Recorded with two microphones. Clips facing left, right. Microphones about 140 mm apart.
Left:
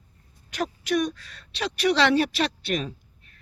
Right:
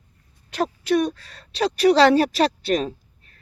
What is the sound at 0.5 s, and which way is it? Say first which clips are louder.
Speech: right 5 dB; 30° right (ahead or behind).